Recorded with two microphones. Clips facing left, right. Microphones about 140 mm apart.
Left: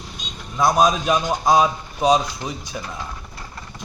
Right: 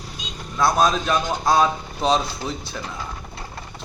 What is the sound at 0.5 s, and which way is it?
A man's voice, 15° left (ahead or behind).